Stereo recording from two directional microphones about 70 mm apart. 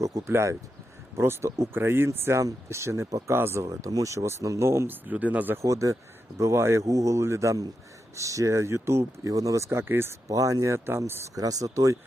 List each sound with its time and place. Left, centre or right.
0.0 s speech: right
3.1 s speech: right
3.3 s speech: right
3.7 s speech: right
5.1 s speech: right
5.6 s speech: right
6.8 s speech: right
9.3 s speech: right
9.6 s speech: right
10.2 s speech: right
10.8 s speech: right
11.3 s speech: right